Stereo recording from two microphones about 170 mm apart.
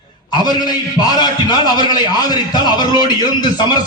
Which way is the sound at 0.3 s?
25° left (ahead or behind).